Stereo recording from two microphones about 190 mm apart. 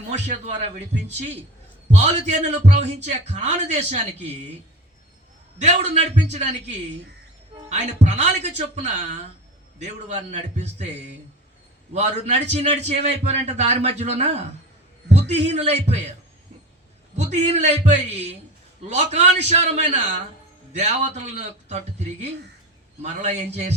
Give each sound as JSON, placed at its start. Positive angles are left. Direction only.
{"t": 0.1, "sound": "a man's voice", "side_deg": -35}
{"t": 1.9, "sound": "a man's voice", "side_deg": -35}
{"t": 5.5, "sound": "a man's voice", "side_deg": -35}
{"t": 7.7, "sound": "a man's voice", "side_deg": -35}
{"t": 11.9, "sound": "a man's voice", "side_deg": -35}
{"t": 17.2, "sound": "a man's voice", "side_deg": -35}